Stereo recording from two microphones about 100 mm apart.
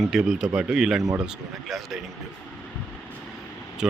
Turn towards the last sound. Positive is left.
turn(degrees=-5)  # may be behind; listen again after turning